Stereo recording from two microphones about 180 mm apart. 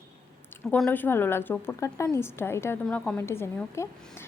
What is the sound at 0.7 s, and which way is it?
A woman's voice, 10° left (ahead or behind).